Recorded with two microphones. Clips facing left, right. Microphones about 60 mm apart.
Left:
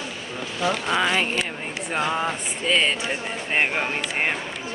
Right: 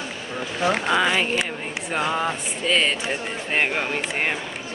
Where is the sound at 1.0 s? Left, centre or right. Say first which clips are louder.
Right 1 dB; centre.